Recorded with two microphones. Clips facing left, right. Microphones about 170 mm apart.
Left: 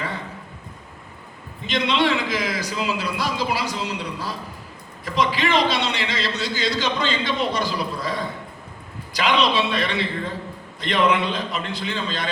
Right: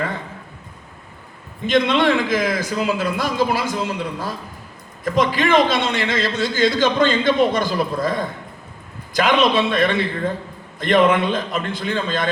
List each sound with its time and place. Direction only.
1.6 s a man's voice: 50° right (ahead or behind)